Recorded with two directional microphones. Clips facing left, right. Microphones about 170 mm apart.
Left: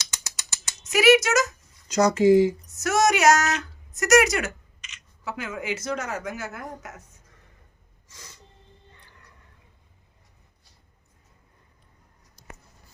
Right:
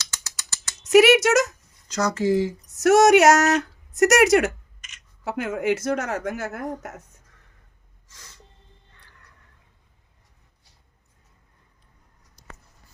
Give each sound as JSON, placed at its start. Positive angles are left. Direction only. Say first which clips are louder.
{"t": 0.0, "sound": "a sound", "louder": "even", "side_deg": 15}
{"t": 0.9, "sound": "speech", "louder": "right 3 dB", "side_deg": -65}
{"t": 1.9, "sound": "speech", "louder": "left 5 dB", "side_deg": 20}
{"t": 2.8, "sound": "a woman's voice", "louder": "right 6 dB", "side_deg": -65}
{"t": 8.0, "sound": "snort", "louder": "left 2 dB", "side_deg": 10}